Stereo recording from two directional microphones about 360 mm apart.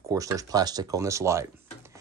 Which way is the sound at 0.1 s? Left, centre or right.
Centre.